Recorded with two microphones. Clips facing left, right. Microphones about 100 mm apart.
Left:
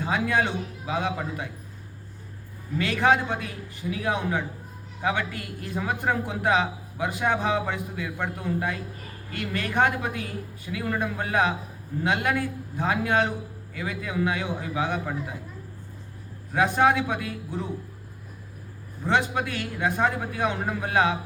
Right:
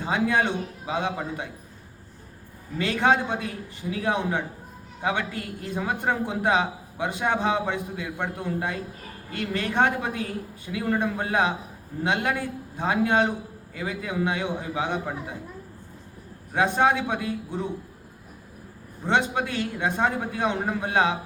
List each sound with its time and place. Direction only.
0.0 s a man's voice: 25° right (ahead or behind)
2.7 s a man's voice: 25° right (ahead or behind)
16.6 s a man's voice: 25° right (ahead or behind)
19.0 s a man's voice: 25° right (ahead or behind)